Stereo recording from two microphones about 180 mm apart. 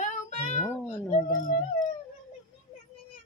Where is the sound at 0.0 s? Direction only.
40° left (ahead or behind).